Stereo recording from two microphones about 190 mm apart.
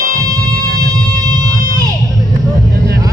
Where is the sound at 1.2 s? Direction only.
20° right (ahead or behind).